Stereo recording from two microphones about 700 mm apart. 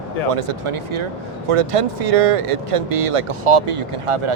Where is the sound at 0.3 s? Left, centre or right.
Right.